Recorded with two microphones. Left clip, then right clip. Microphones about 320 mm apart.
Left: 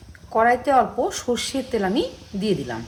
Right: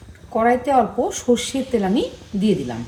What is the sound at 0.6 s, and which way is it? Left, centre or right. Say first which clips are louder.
A woman's voice: right 1 dB; left.